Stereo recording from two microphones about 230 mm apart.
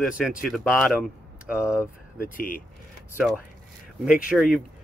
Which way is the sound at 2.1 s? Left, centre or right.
Left.